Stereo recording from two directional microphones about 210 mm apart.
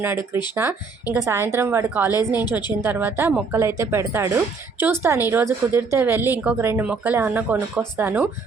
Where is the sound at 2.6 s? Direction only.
20° left (ahead or behind).